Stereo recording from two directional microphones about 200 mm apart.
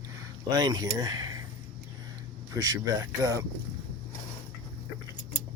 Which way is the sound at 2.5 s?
20° right (ahead or behind).